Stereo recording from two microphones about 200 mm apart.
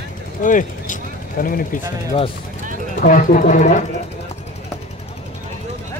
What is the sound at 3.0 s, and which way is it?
Speech, 40° left (ahead or behind).